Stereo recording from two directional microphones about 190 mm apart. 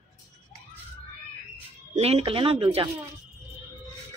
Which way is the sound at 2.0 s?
30° right (ahead or behind).